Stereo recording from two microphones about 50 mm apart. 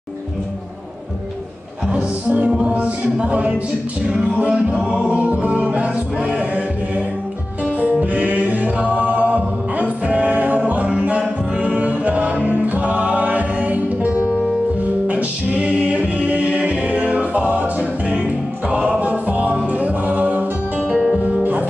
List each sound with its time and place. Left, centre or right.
1.9 s music: right
7.8 s music: right
20.9 s music: centre
21.2 s music: right